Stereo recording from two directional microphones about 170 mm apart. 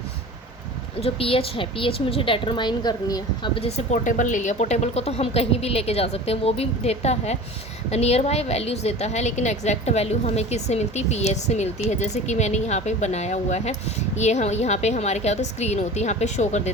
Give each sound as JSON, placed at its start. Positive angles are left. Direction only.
{"t": 0.9, "sound": "a woman's voice", "side_deg": 35}